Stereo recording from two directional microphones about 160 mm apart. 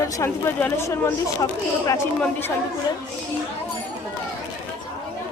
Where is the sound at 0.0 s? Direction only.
15° left (ahead or behind).